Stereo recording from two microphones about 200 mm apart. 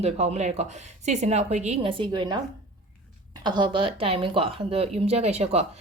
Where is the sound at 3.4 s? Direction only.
20° right (ahead or behind).